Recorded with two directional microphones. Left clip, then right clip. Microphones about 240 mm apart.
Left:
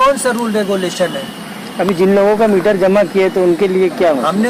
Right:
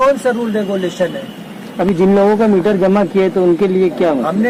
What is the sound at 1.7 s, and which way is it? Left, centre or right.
Speech, right.